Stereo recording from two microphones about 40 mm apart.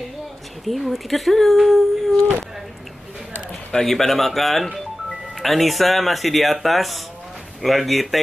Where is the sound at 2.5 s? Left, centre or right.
Centre.